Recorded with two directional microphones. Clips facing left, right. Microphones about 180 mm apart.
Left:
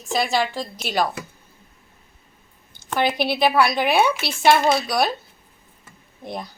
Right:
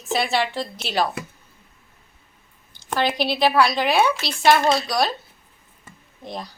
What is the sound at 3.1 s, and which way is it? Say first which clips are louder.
Speech: left 1 dB; 55° left (ahead or behind).